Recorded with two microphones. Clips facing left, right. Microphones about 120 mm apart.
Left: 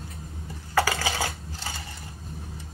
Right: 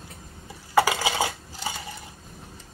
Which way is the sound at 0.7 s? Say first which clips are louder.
Right 3 dB; 15° right (ahead or behind).